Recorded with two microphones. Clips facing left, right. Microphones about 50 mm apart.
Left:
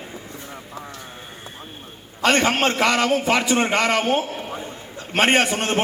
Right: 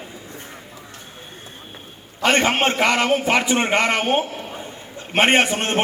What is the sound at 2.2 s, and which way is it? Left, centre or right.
A man's voice, right.